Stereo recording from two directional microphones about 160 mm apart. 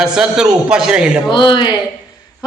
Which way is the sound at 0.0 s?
5° right (ahead or behind).